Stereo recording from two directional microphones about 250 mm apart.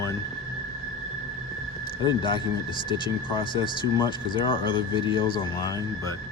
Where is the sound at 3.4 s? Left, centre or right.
Centre.